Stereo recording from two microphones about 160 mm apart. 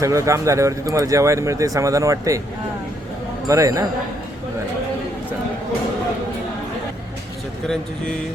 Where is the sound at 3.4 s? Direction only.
20° right (ahead or behind).